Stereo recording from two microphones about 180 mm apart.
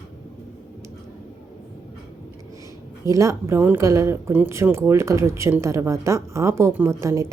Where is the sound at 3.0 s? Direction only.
15° right (ahead or behind).